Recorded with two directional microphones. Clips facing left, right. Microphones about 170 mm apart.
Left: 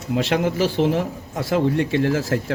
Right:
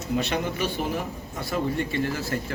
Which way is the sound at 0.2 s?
90° left.